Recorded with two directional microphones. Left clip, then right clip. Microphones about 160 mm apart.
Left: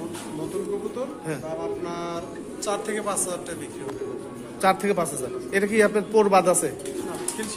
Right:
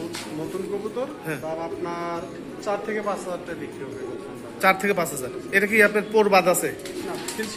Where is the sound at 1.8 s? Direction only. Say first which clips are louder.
Right 2 dB; 15° right (ahead or behind).